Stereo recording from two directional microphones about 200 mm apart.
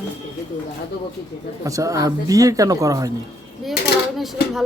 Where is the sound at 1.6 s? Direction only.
15° right (ahead or behind).